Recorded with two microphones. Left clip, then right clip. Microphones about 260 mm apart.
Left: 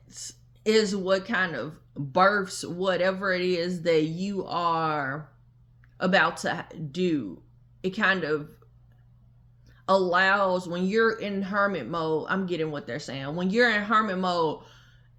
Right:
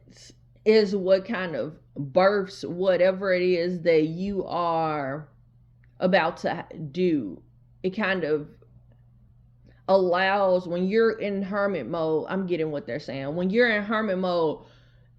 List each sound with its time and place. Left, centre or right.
0.1 s speech: left
9.6 s speech: left